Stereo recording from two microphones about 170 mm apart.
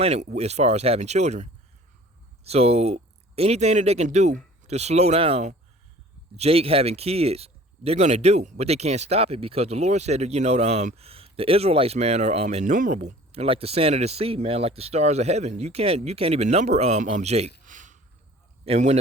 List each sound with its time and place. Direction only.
0.0 s speech: 40° right (ahead or behind)
17.7 s a sound: 50° right (ahead or behind)
18.6 s speech: 40° right (ahead or behind)